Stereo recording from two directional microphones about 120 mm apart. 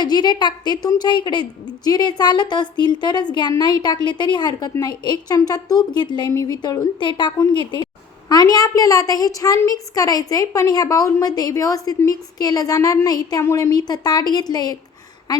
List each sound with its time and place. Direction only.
0.0 s a woman's voice: 35° left (ahead or behind)